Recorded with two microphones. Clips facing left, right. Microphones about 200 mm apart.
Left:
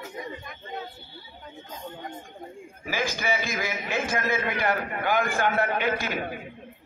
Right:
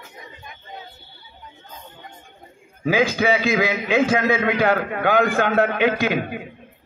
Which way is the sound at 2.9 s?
65° right (ahead or behind).